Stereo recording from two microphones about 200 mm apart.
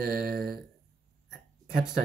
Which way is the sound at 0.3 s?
50° right (ahead or behind).